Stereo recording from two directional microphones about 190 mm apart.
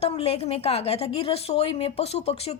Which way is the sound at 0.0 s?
35° left (ahead or behind).